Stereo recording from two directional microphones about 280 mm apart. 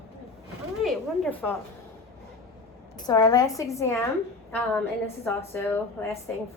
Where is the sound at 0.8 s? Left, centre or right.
Centre.